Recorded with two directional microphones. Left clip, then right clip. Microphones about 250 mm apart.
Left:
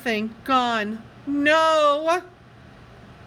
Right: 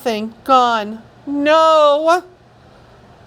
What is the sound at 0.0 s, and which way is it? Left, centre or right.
A woman's voice, centre.